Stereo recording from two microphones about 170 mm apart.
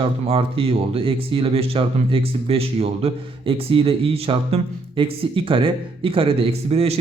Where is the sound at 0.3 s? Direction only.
35° right (ahead or behind).